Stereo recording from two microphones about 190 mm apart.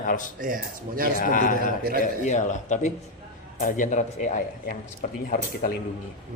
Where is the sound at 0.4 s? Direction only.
45° right (ahead or behind).